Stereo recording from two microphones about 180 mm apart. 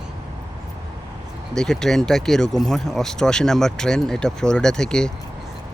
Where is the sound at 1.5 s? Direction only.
5° left (ahead or behind).